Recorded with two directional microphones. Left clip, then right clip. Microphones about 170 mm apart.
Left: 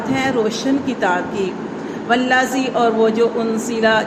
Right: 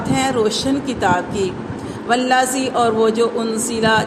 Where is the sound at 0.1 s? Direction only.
30° right (ahead or behind).